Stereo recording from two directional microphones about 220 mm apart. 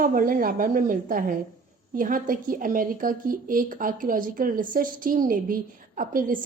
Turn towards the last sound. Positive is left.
turn(degrees=-40)  # may be behind; listen again after turning